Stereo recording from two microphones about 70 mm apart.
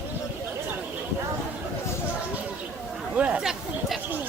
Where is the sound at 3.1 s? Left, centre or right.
Centre.